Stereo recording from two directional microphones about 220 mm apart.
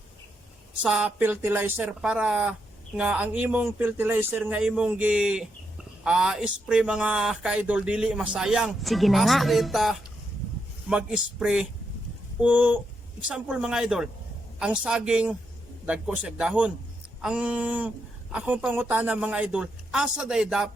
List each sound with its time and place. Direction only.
0.8 s speech: 5° right (ahead or behind)